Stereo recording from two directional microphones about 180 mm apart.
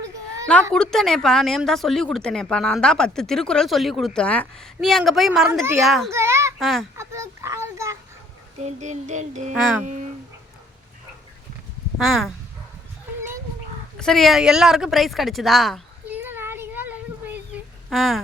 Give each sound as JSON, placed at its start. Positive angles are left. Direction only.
{"t": 0.7, "sound": "speech", "side_deg": 5}
{"t": 6.1, "sound": "a child's voice", "side_deg": -15}
{"t": 6.6, "sound": "speech", "side_deg": 0}
{"t": 6.9, "sound": "a sound", "side_deg": -15}
{"t": 8.6, "sound": "child singing", "side_deg": -40}
{"t": 9.6, "sound": "speech", "side_deg": -5}
{"t": 11.9, "sound": "speech", "side_deg": 0}
{"t": 14.0, "sound": "speech", "side_deg": 0}
{"t": 16.1, "sound": "child singing", "side_deg": -10}